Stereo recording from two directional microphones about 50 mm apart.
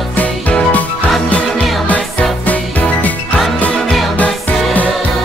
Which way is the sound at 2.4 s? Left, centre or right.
Left.